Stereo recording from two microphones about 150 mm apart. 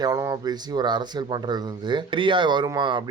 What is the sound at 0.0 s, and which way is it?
Speech, 25° right (ahead or behind).